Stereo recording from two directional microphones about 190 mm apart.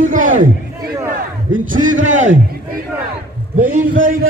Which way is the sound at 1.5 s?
45° right (ahead or behind).